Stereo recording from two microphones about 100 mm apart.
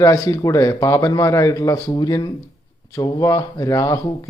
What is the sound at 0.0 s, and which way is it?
Speech, 35° left (ahead or behind).